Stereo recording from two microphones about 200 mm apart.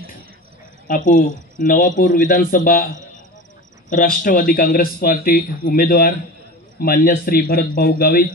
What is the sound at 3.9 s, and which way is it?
Speech, 40° left (ahead or behind).